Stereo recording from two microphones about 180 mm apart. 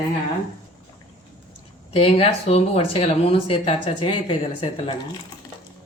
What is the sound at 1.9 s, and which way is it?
Speech, 35° left (ahead or behind).